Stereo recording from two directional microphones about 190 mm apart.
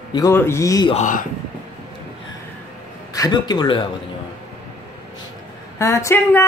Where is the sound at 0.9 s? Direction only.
40° left (ahead or behind).